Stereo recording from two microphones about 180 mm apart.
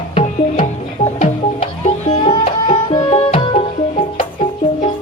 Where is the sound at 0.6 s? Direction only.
40° left (ahead or behind).